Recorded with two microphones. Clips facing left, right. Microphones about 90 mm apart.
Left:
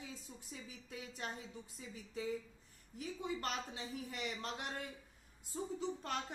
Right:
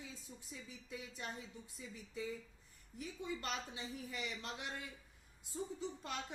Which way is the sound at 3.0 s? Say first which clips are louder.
Left 3 dB; 50° left (ahead or behind).